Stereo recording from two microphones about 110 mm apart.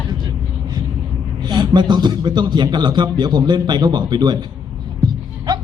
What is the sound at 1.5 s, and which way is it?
A man's voice, 40° right (ahead or behind).